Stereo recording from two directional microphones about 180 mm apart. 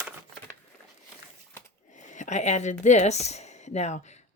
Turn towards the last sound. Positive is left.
turn(degrees=40)  # may be behind; listen again after turning